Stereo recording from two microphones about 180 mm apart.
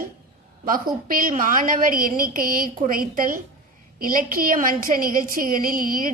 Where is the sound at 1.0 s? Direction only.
50° right (ahead or behind).